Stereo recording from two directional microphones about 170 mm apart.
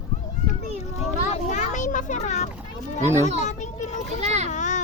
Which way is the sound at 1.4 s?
45° left (ahead or behind).